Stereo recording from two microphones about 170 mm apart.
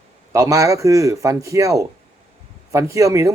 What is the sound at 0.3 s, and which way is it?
A man's voice, 20° right (ahead or behind).